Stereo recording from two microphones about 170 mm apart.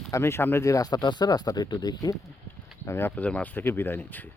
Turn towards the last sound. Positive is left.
turn(degrees=10)  # may be behind; listen again after turning